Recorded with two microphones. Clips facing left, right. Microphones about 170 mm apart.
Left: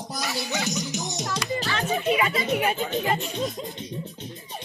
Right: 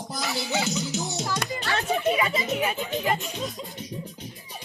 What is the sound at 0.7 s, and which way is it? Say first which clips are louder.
Music: right 1 dB; 15° left (ahead or behind).